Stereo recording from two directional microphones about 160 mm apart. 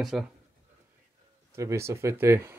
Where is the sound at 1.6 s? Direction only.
20° right (ahead or behind).